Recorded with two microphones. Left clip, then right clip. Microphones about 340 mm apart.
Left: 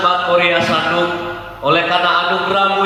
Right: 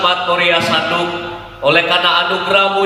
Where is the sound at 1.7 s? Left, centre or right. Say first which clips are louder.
Right 2 dB; right.